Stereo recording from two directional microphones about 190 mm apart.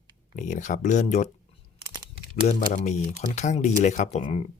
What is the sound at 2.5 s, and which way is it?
Speech, 40° left (ahead or behind).